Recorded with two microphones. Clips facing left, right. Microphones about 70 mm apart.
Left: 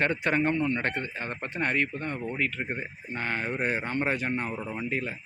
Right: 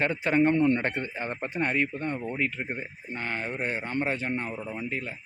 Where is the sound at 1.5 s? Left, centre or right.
Centre.